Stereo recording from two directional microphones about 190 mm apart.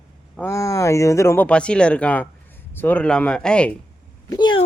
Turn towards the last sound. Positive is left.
turn(degrees=25)  # may be behind; listen again after turning